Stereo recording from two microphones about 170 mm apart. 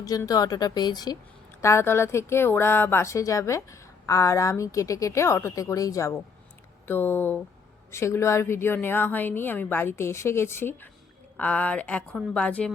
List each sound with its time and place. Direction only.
0.0 s a woman's voice: 20° left (ahead or behind)